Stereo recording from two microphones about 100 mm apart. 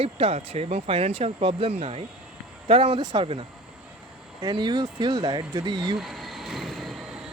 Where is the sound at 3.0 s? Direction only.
45° right (ahead or behind).